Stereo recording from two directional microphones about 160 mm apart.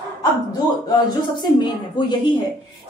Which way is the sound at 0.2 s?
25° left (ahead or behind).